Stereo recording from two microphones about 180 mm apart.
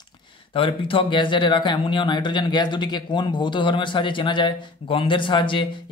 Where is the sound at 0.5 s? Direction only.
30° left (ahead or behind).